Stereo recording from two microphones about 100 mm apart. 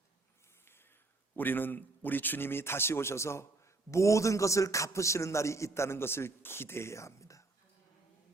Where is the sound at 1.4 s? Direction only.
20° left (ahead or behind).